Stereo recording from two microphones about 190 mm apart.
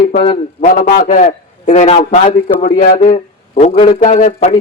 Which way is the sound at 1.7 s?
35° left (ahead or behind).